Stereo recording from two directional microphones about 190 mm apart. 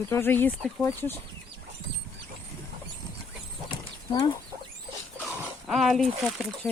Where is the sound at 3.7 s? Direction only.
25° left (ahead or behind).